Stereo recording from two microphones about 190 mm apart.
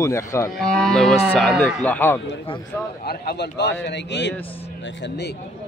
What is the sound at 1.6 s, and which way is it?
Speech, 10° left (ahead or behind).